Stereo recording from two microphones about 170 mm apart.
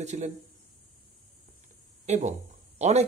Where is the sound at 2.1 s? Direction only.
45° right (ahead or behind).